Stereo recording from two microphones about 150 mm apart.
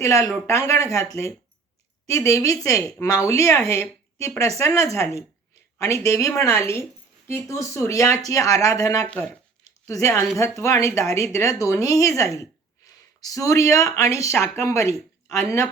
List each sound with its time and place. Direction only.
0.0 s a woman's voice: 20° left (ahead or behind)
9.0 s speech: 5° left (ahead or behind)
9.8 s a woman's voice: 20° left (ahead or behind)